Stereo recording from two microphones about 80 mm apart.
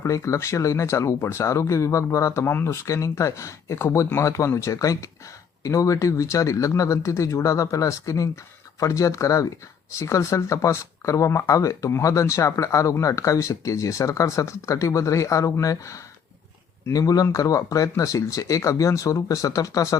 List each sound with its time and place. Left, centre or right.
0.0 s speech: left
2.8 s speech: left